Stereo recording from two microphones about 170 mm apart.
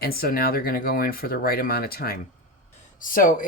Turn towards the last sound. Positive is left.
turn(degrees=50)  # may be behind; listen again after turning